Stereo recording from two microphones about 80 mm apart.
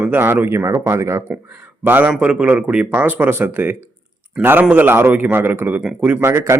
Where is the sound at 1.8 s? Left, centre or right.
Right.